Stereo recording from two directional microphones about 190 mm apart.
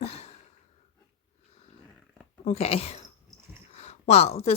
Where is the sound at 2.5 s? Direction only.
30° left (ahead or behind).